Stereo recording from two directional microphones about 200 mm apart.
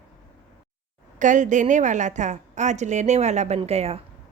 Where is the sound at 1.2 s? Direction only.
40° right (ahead or behind).